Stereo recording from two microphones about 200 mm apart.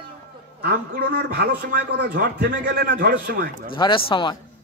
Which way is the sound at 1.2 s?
55° right (ahead or behind).